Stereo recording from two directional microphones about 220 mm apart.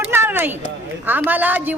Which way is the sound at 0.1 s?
10° right (ahead or behind).